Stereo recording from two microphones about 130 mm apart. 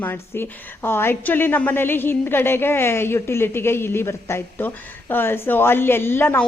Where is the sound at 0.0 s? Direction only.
15° left (ahead or behind).